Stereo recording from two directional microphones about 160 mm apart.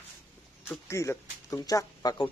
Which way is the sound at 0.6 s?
15° left (ahead or behind).